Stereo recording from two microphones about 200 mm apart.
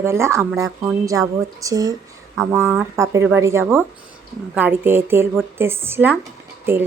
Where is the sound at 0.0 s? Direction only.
15° right (ahead or behind).